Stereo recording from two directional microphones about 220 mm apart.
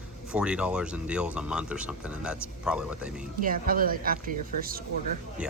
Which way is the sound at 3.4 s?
40° right (ahead or behind).